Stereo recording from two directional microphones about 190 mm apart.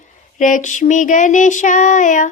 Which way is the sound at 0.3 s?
40° left (ahead or behind).